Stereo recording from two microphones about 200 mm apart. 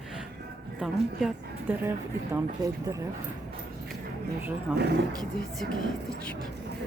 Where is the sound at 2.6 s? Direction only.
20° right (ahead or behind).